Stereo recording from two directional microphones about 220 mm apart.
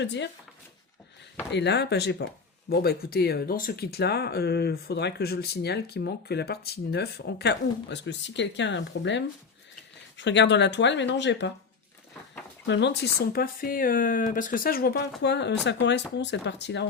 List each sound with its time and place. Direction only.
0.0 s speech: 50° left (ahead or behind)
1.5 s speech: 50° left (ahead or behind)
12.6 s speech: 50° left (ahead or behind)